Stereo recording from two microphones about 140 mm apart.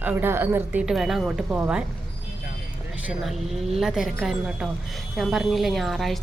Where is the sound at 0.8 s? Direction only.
Centre (ahead or behind).